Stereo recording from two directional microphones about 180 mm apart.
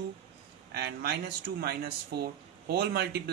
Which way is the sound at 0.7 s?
60° right (ahead or behind).